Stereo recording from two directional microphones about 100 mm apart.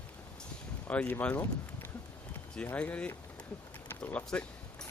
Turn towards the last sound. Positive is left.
turn(degrees=15)  # may be behind; listen again after turning